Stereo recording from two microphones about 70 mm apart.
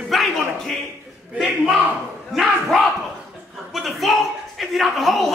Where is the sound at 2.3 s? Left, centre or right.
Centre.